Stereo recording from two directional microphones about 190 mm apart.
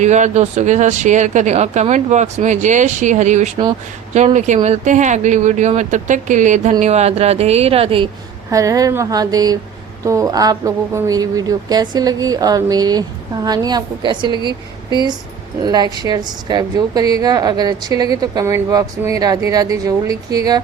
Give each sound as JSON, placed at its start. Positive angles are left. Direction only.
{"t": 0.0, "sound": "speech", "side_deg": -40}
{"t": 8.4, "sound": "a woman's voice", "side_deg": -15}
{"t": 15.6, "sound": "a woman's voice", "side_deg": -20}